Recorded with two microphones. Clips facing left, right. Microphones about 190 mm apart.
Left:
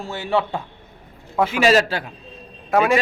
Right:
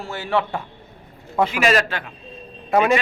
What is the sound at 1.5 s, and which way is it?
Speech, 30° left (ahead or behind).